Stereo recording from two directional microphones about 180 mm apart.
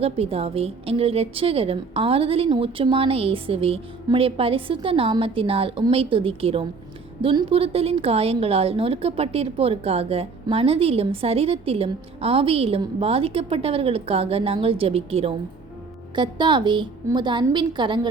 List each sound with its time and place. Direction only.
0.0 s a woman's voice: 35° right (ahead or behind)